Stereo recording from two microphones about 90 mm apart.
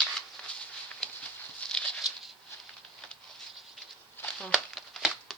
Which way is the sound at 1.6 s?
10° left (ahead or behind).